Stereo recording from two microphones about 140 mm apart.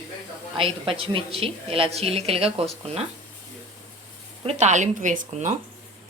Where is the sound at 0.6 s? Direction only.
40° right (ahead or behind).